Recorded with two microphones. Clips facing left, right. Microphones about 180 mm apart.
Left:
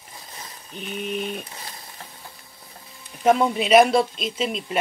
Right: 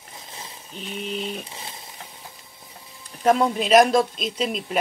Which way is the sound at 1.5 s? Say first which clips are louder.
Right 1 dB; 20° right (ahead or behind).